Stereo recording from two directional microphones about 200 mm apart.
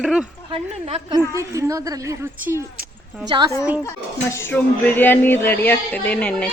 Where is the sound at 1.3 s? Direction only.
15° right (ahead or behind).